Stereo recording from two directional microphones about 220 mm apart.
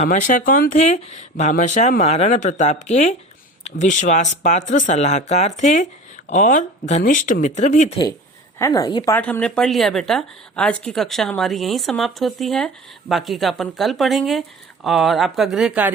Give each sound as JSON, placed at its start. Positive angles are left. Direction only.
{"t": 0.0, "sound": "speech", "side_deg": 35}
{"t": 8.5, "sound": "a woman's voice", "side_deg": 15}
{"t": 9.1, "sound": "speech", "side_deg": 5}